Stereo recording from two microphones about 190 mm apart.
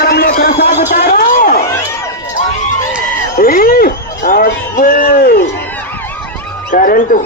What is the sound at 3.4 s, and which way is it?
A man's voice, 50° left (ahead or behind).